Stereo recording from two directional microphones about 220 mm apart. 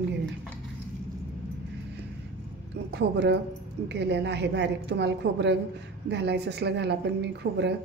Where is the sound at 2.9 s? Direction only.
50° right (ahead or behind).